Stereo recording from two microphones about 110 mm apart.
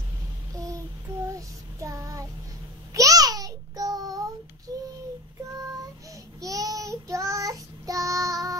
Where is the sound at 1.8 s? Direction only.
30° right (ahead or behind).